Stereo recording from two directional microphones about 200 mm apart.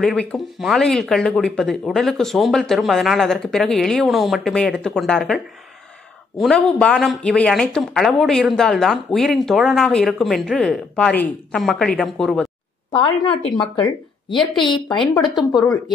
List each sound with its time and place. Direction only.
0.0 s speech: 5° left (ahead or behind)
12.9 s speech: 25° left (ahead or behind)
14.3 s speech: centre (ahead or behind)
14.7 s speech: 20° left (ahead or behind)
15.2 s speech: centre (ahead or behind)